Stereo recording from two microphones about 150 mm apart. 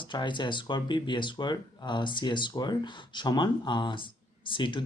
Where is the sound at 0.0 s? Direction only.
30° left (ahead or behind).